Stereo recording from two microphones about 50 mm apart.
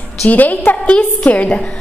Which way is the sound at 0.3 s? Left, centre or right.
Left.